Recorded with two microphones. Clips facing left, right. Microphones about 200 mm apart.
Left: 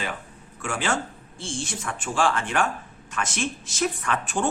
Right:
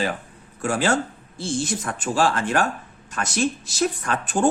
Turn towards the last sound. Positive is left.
turn(degrees=-35)  # may be behind; listen again after turning